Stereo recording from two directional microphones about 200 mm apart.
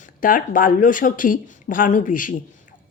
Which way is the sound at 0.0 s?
40° left (ahead or behind).